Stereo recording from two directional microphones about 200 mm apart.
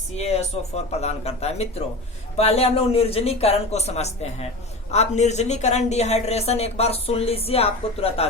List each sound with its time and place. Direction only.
0.1 s a woman's voice: 30° left (ahead or behind)